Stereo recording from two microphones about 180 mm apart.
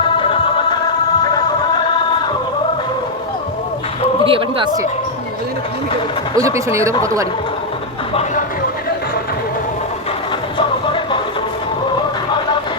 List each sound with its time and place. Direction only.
4.3 s speech: 30° right (ahead or behind)
6.4 s speech: 15° right (ahead or behind)
10.6 s music: 25° left (ahead or behind)